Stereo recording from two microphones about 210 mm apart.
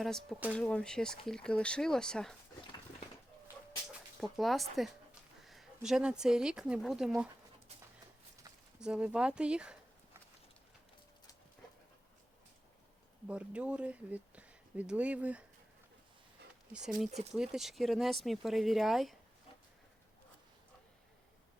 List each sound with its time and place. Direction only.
0.0 s speech: centre (ahead or behind)
4.2 s speech: centre (ahead or behind)
8.4 s a sound: 20° right (ahead or behind)
8.8 s speech: 5° right (ahead or behind)
13.2 s speech: 5° right (ahead or behind)
17.3 s speech: 5° right (ahead or behind)